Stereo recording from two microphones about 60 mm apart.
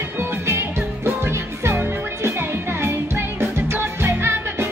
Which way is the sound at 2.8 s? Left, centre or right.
Right.